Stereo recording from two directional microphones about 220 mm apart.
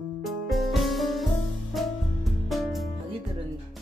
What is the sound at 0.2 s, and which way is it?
Music, centre (ahead or behind).